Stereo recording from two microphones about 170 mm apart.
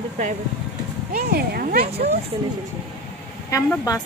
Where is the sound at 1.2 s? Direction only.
60° right (ahead or behind).